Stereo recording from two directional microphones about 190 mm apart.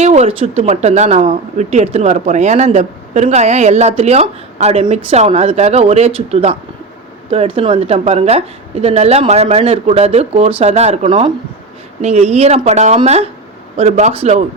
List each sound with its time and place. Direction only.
0.0 s speech: 35° right (ahead or behind)